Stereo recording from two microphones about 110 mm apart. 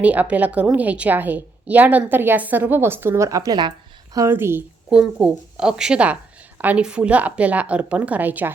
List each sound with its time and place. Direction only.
0.0 s a woman's voice: 15° right (ahead or behind)
4.9 s a woman's voice: 10° right (ahead or behind)